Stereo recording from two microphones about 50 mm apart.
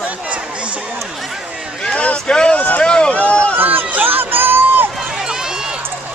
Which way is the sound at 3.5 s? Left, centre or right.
Right.